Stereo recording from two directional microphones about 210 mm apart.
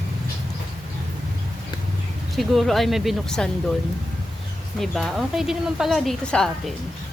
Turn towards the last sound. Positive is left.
turn(degrees=5)  # may be behind; listen again after turning